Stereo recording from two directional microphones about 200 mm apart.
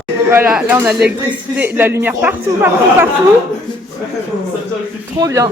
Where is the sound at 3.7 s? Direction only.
25° left (ahead or behind).